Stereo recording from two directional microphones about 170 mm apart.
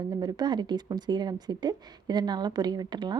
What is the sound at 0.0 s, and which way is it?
A woman's voice, 25° right (ahead or behind).